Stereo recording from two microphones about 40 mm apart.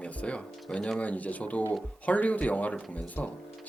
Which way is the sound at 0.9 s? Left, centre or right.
Left.